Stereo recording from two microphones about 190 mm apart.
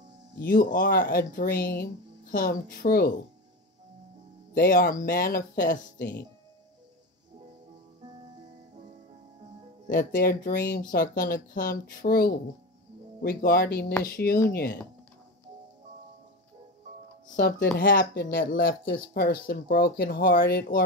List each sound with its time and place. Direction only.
0.4 s speech: 50° left (ahead or behind)
4.6 s speech: 50° left (ahead or behind)
9.8 s speech: 50° left (ahead or behind)
17.4 s speech: 50° left (ahead or behind)